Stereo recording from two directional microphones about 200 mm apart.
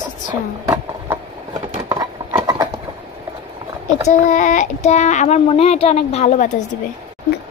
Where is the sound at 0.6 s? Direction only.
15° right (ahead or behind).